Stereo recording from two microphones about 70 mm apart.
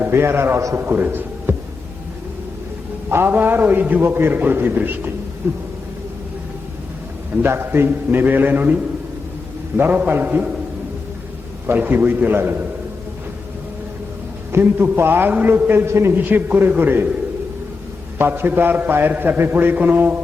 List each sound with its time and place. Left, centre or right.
0.0 s a man's voice: right
3.1 s a man's voice: right
7.4 s a man's voice: right
11.6 s a man's voice: right
14.5 s a man's voice: right
15.9 s a man's voice: right
16.1 s a man's voice: right
18.2 s a man's voice: right